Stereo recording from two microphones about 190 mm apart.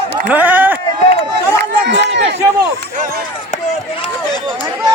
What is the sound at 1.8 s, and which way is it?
Run, 65° right (ahead or behind).